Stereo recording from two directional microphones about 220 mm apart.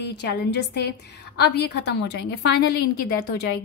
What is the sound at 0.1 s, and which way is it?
A woman's voice, 50° left (ahead or behind).